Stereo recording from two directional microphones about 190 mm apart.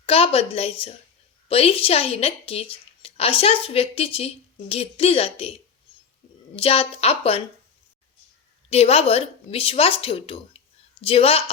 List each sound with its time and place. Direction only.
0.0 s a woman's voice: 30° left (ahead or behind)
8.7 s a woman's voice: 30° left (ahead or behind)